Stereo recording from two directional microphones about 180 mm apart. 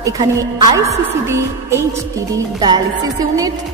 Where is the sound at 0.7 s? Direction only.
15° right (ahead or behind).